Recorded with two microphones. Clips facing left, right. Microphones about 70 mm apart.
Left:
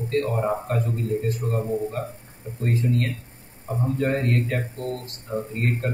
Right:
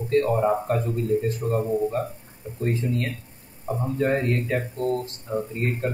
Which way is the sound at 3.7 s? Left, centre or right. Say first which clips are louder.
Even; right.